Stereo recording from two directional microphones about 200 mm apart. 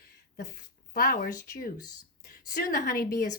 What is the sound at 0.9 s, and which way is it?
A woman's voice, 50° left (ahead or behind).